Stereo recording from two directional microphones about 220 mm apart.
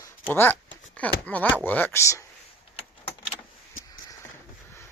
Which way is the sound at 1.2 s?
5° left (ahead or behind).